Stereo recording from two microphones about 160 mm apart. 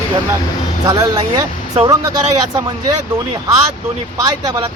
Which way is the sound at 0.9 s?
25° right (ahead or behind).